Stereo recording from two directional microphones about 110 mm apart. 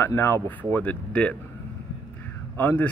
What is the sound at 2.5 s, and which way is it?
Speech, 15° left (ahead or behind).